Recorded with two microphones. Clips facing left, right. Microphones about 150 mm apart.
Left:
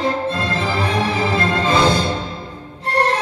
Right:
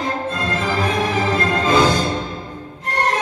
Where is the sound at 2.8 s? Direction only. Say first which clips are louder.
Left 3 dB; 30° left (ahead or behind).